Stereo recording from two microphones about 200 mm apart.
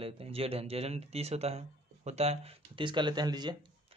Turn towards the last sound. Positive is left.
turn(degrees=-20)  # may be behind; listen again after turning